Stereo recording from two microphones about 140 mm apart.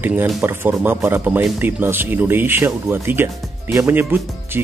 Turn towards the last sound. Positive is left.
turn(degrees=-15)  # may be behind; listen again after turning